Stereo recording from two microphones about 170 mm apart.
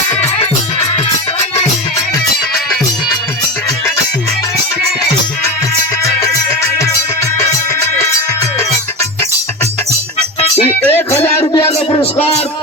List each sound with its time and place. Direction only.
10.4 s music: 35° left (ahead or behind)
10.8 s music: 10° left (ahead or behind)
11.2 s music: 35° left (ahead or behind)